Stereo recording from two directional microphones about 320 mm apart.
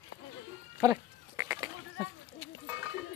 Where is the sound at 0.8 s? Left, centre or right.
Centre.